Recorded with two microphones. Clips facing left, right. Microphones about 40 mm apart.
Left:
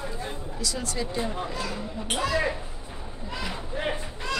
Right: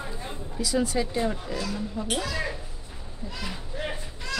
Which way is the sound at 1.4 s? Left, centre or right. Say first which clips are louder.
Even; left.